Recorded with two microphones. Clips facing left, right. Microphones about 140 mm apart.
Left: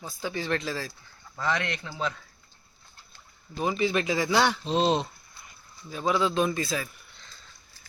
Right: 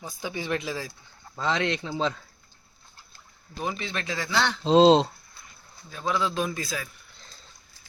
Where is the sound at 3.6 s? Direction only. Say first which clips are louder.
Left 6 dB; 5° left (ahead or behind).